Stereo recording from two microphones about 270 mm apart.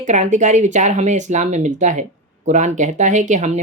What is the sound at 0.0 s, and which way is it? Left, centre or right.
Speech, right.